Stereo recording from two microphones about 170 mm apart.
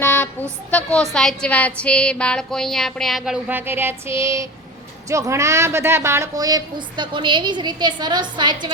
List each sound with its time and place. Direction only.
0.0 s a woman's voice: 10° left (ahead or behind)
1.1 s music: 5° left (ahead or behind); by 4.4 s 15° right (ahead or behind)
5.0 s a woman's voice: 20° right (ahead or behind)